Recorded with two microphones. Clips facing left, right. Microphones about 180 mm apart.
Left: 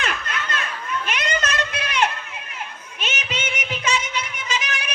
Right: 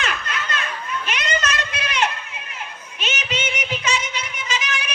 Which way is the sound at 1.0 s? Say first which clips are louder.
Right 1 dB; 55° left (ahead or behind).